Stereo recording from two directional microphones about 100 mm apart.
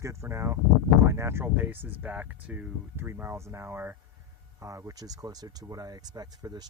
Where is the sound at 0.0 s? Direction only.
30° right (ahead or behind).